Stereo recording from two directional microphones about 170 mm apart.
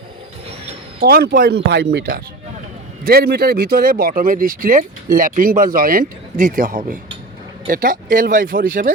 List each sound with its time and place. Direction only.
1.0 s speech: 70° right (ahead or behind)